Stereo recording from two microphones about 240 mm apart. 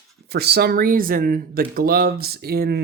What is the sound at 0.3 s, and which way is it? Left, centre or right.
Speech, right.